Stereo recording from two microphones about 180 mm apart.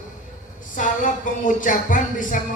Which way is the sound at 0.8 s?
45° left (ahead or behind).